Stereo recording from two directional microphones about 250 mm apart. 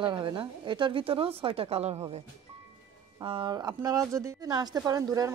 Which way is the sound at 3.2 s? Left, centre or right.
Centre.